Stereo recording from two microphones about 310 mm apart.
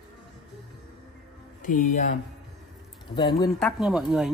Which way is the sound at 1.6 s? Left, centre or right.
Left.